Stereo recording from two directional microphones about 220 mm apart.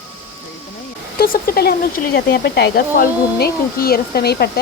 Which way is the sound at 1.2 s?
40° left (ahead or behind).